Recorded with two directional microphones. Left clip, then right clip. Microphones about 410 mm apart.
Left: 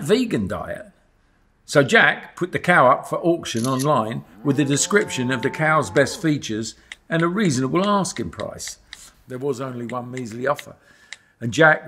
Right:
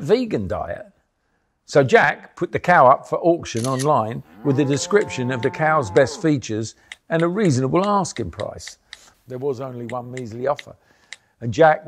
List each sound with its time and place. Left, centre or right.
0.0 s speech: left
3.5 s speech: centre
3.9 s speech: left
8.9 s a sound: centre
9.3 s speech: left
10.5 s a sound: centre
11.3 s speech: left